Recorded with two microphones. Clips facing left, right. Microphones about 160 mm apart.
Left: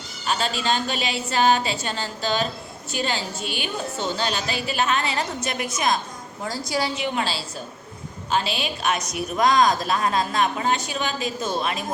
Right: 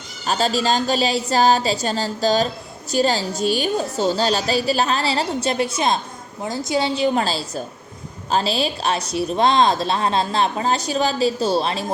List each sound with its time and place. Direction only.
0.3 s a woman's voice: 40° right (ahead or behind)